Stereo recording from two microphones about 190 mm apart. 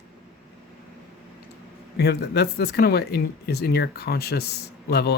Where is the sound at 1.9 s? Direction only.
60° left (ahead or behind).